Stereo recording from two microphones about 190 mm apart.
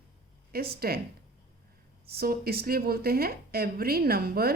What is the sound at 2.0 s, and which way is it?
Speech, 55° right (ahead or behind).